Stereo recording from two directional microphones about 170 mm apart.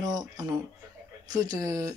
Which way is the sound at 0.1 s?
25° right (ahead or behind).